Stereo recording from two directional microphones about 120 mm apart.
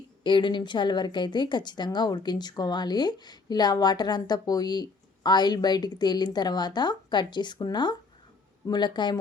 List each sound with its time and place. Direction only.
0.2 s a woman's voice: 40° left (ahead or behind)